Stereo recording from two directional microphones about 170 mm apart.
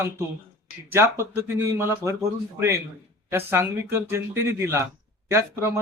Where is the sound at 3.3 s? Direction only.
15° right (ahead or behind).